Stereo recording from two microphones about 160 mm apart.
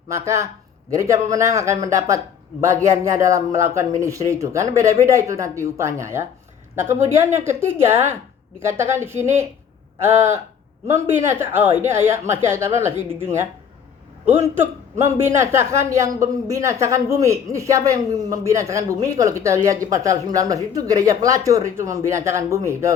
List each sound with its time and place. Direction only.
0.1 s a man's voice: 20° right (ahead or behind)